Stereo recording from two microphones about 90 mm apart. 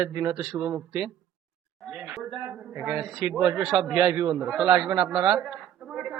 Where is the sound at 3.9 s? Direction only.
10° right (ahead or behind).